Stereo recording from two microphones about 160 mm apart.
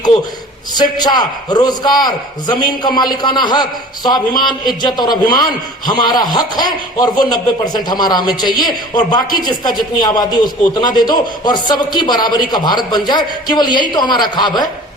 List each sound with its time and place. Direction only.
0.7 s a man's voice: 25° left (ahead or behind)